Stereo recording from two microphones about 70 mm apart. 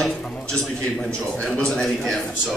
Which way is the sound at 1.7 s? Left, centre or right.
Centre.